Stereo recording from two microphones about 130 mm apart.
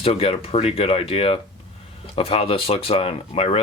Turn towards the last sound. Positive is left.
turn(degrees=50)  # may be behind; listen again after turning